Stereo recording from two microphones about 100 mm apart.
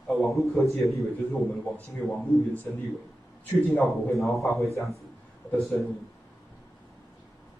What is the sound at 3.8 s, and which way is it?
Speech, centre (ahead or behind).